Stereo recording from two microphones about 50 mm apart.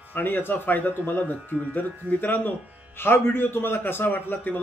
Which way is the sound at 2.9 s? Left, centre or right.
Left.